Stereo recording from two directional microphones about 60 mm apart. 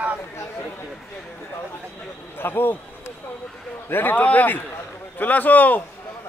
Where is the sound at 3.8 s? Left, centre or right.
Left.